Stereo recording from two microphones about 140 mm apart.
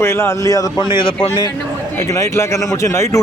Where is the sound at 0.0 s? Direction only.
20° left (ahead or behind).